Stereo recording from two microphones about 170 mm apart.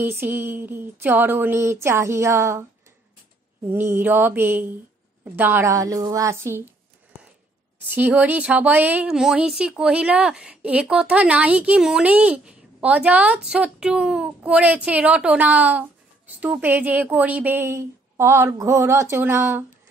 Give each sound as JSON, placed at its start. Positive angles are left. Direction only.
{"t": 0.0, "sound": "speech", "side_deg": -15}
{"t": 3.6, "sound": "speech", "side_deg": -15}
{"t": 7.9, "sound": "speech", "side_deg": -10}